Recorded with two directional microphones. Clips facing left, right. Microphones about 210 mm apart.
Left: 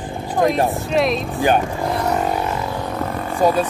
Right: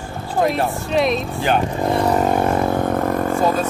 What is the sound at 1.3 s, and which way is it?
Speech, 15° left (ahead or behind).